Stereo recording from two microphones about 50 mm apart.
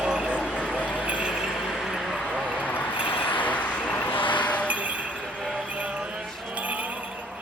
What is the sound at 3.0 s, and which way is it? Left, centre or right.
Vehicle, left.